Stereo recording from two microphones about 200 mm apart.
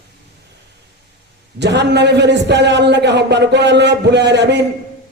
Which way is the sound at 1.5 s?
60° right (ahead or behind).